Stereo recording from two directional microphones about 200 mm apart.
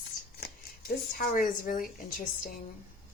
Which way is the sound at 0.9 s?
45° left (ahead or behind).